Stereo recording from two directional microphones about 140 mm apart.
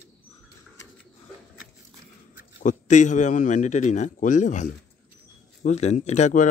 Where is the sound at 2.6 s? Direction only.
60° left (ahead or behind).